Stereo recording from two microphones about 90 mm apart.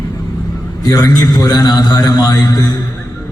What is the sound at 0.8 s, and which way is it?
A man's voice, 45° left (ahead or behind).